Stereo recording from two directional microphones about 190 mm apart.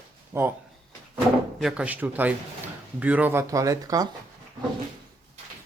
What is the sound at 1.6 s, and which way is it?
Speech, 5° right (ahead or behind).